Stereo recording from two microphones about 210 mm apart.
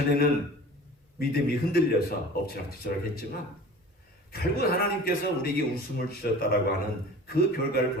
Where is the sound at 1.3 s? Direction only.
45° left (ahead or behind).